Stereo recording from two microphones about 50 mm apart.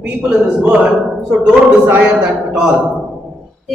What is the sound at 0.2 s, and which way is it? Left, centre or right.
A man's voice, right.